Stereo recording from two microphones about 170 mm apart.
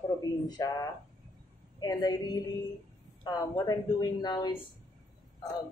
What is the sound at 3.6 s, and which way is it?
Speech, 25° left (ahead or behind).